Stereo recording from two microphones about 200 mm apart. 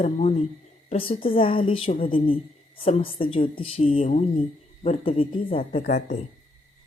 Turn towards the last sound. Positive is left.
turn(degrees=40)  # may be behind; listen again after turning